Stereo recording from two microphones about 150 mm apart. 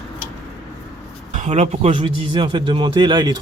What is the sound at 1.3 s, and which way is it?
A man's voice, 50° right (ahead or behind).